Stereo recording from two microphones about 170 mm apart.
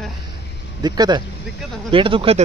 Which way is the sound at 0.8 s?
25° right (ahead or behind).